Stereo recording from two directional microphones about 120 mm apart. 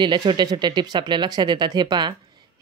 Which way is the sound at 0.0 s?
40° right (ahead or behind).